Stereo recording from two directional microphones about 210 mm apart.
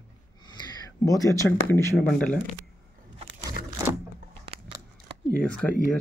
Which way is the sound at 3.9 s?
10° right (ahead or behind).